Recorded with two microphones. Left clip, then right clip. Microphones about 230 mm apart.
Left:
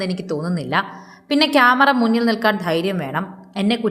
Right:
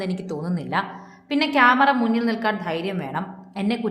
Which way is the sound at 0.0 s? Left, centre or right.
Centre.